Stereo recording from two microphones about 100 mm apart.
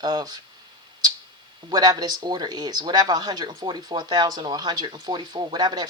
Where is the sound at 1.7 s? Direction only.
40° right (ahead or behind).